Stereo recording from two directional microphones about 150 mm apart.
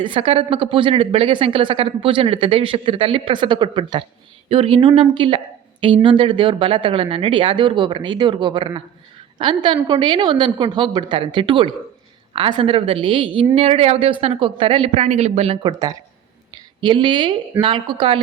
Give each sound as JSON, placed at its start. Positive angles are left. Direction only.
{"t": 0.0, "sound": "speech", "side_deg": -35}
{"t": 16.8, "sound": "speech", "side_deg": -30}